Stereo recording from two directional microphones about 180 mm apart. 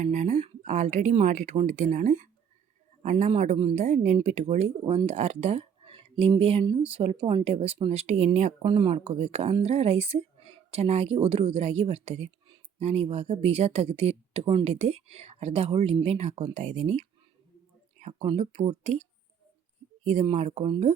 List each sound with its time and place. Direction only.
0.0 s speech: 40° right (ahead or behind)
20.1 s speech: 35° right (ahead or behind)